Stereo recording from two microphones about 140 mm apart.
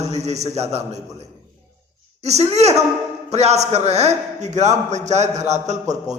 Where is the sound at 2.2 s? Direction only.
50° right (ahead or behind).